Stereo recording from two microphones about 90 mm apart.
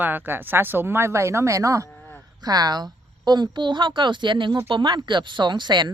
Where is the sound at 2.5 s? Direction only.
50° right (ahead or behind).